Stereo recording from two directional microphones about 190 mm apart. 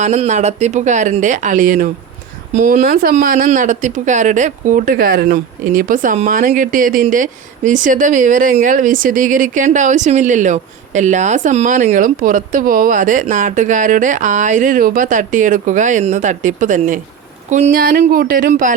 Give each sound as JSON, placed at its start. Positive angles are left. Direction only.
{"t": 0.0, "sound": "speech", "side_deg": -40}